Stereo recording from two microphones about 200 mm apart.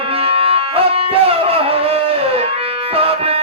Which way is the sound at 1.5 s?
30° right (ahead or behind).